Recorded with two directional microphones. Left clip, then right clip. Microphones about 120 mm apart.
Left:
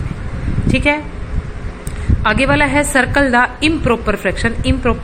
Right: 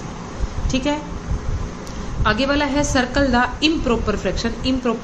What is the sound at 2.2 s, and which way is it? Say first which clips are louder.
A woman's voice: left 5 dB; 30° left (ahead or behind).